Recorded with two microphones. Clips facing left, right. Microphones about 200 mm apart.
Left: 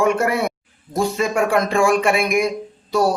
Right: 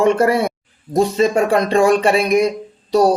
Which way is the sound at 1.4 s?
35° right (ahead or behind).